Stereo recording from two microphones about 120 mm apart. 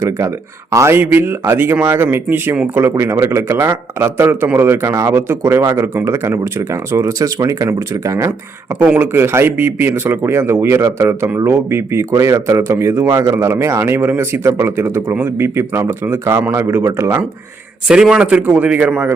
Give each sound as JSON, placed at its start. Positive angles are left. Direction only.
{"t": 0.0, "sound": "speech", "side_deg": -25}
{"t": 8.8, "sound": "speech", "side_deg": -15}
{"t": 17.8, "sound": "a man's voice", "side_deg": -5}